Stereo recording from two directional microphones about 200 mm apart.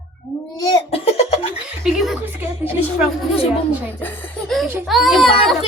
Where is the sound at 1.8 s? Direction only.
Centre (ahead or behind).